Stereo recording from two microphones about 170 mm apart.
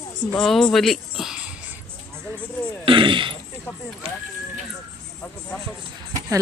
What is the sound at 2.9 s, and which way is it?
Speech, 30° right (ahead or behind).